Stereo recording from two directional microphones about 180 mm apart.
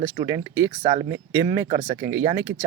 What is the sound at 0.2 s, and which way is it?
Speech, 20° right (ahead or behind).